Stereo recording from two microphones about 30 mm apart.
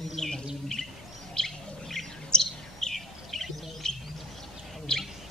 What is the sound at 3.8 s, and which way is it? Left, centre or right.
Bird, centre.